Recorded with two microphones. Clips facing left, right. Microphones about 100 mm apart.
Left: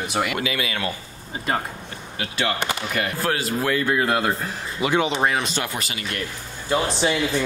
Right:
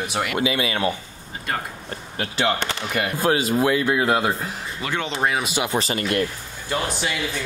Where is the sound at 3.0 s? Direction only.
20° right (ahead or behind).